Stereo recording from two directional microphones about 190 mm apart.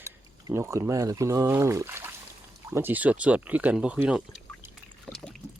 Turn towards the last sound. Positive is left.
turn(degrees=0)  # may be behind; listen again after turning